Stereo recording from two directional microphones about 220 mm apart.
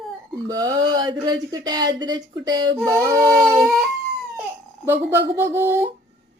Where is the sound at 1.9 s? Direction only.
20° right (ahead or behind).